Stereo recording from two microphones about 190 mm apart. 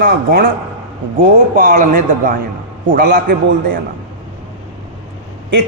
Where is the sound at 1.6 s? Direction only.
45° right (ahead or behind).